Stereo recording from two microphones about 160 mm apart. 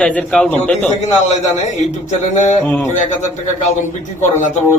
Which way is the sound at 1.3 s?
45° left (ahead or behind).